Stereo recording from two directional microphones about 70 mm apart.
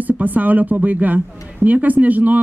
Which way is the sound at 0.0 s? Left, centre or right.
Right.